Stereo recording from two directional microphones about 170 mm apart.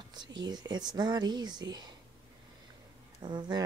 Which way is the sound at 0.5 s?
25° right (ahead or behind).